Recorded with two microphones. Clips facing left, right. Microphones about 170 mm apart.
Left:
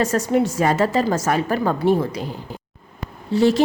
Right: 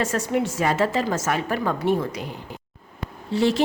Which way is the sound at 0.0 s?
40° left (ahead or behind).